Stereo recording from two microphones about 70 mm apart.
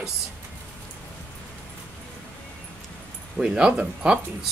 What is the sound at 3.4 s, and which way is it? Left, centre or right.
Speech, centre.